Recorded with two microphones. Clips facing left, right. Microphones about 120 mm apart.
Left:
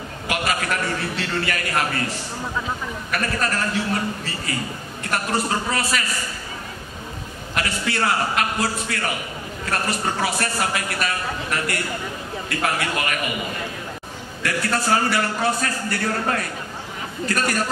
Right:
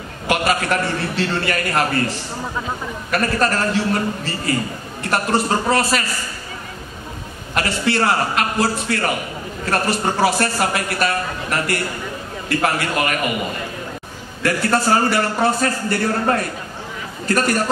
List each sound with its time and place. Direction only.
0.3 s a man's voice: 35° right (ahead or behind)
3.1 s a man's voice: 35° right (ahead or behind)
7.5 s a man's voice: 35° right (ahead or behind)
14.4 s a man's voice: 35° right (ahead or behind)